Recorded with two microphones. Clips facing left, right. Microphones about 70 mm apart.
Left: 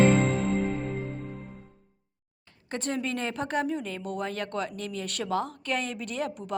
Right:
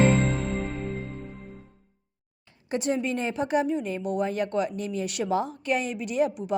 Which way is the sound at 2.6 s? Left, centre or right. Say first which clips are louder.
Right 4 dB; centre.